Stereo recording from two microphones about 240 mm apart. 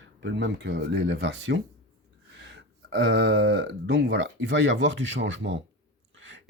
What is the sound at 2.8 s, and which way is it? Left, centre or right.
Speech, right.